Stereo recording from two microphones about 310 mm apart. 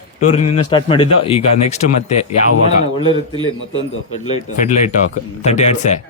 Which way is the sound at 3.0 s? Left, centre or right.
Centre.